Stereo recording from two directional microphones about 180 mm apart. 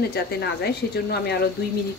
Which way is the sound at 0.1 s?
65° left (ahead or behind).